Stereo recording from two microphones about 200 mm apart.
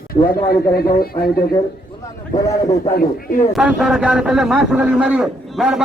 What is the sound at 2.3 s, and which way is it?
Speech, 15° left (ahead or behind).